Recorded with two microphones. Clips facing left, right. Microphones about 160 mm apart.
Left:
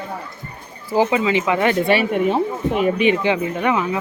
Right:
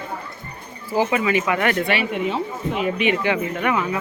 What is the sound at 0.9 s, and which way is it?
Speech, 20° left (ahead or behind).